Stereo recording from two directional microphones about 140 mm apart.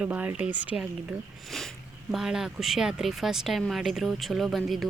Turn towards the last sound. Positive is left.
turn(degrees=0)  # may be behind; listen again after turning